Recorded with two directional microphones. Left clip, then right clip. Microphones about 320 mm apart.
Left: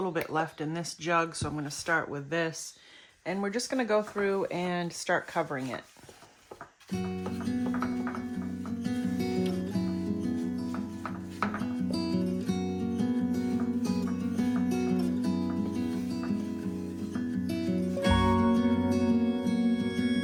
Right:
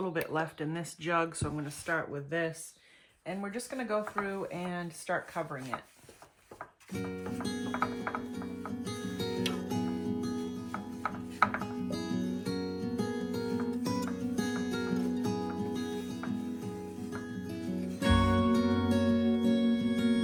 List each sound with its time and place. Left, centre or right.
0.0 s speech: centre
6.9 s music: centre
11.9 s music: centre
17.4 s music: centre